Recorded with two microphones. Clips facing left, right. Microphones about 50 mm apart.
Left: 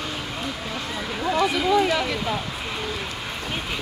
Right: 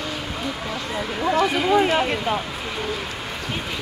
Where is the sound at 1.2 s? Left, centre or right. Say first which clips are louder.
Right 2 dB; right.